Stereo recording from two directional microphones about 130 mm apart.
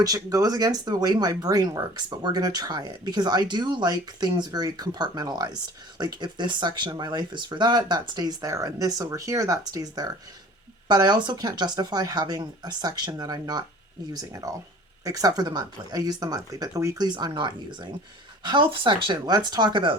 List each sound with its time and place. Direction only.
0.0 s speech: 30° right (ahead or behind)